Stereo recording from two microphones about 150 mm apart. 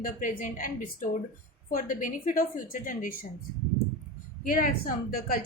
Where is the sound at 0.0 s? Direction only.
65° left (ahead or behind).